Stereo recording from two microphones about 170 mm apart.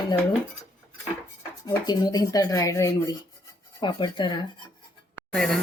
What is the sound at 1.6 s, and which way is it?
A woman's voice, 25° left (ahead or behind).